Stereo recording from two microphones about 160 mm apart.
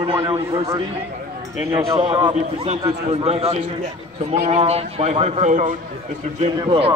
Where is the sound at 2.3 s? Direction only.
40° right (ahead or behind).